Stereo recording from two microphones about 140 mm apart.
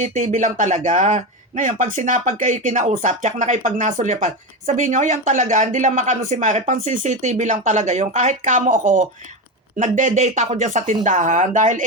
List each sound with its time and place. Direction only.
0.0 s speech: 60° right (ahead or behind)